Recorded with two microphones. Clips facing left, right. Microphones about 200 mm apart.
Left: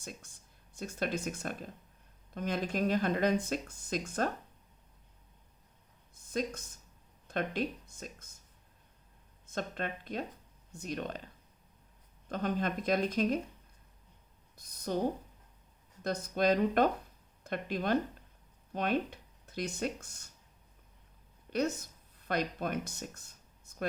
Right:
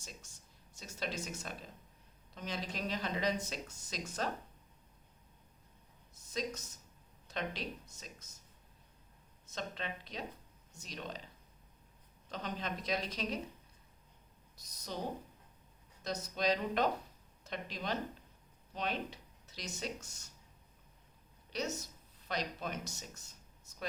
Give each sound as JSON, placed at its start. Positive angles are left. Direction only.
{"t": 0.0, "sound": "speech", "side_deg": 55}
{"t": 6.1, "sound": "speech", "side_deg": 55}
{"t": 9.5, "sound": "speech", "side_deg": 50}
{"t": 12.3, "sound": "speech", "side_deg": 50}
{"t": 14.5, "sound": "a sound", "side_deg": 55}
{"t": 16.0, "sound": "speech", "side_deg": 55}
{"t": 21.5, "sound": "speech", "side_deg": 55}